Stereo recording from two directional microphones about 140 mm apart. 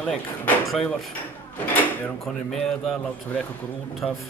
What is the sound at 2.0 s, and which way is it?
Speech, 5° left (ahead or behind).